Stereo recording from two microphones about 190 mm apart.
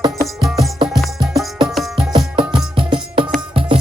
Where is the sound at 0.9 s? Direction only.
Centre (ahead or behind).